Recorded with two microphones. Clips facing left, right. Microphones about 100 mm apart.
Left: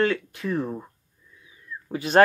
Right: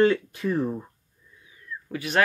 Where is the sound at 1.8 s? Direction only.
30° left (ahead or behind).